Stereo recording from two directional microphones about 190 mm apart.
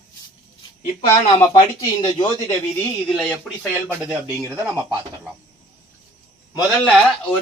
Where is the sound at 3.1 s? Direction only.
Centre (ahead or behind).